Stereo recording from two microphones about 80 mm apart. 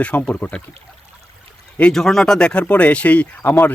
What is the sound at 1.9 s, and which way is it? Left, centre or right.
Speech, centre.